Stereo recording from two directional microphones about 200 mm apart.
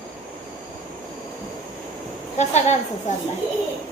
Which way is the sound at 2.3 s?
35° left (ahead or behind).